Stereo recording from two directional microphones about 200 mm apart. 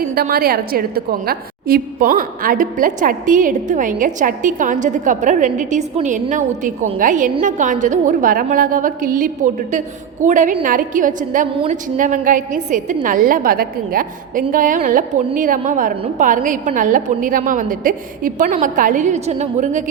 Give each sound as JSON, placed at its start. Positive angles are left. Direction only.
{"t": 0.1, "sound": "a woman's voice", "side_deg": -50}